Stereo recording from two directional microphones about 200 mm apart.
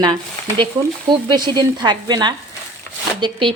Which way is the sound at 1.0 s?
20° right (ahead or behind).